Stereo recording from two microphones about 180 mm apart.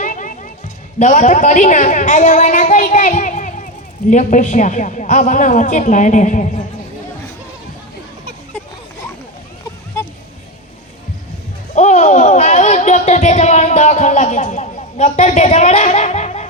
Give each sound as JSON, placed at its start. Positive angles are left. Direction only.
{"t": 0.0, "sound": "music", "side_deg": 45}
{"t": 0.9, "sound": "a woman's voice", "side_deg": 45}
{"t": 11.7, "sound": "a sound", "side_deg": 40}